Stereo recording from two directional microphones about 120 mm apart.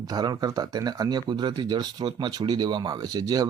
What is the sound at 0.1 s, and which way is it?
Speech, 30° right (ahead or behind).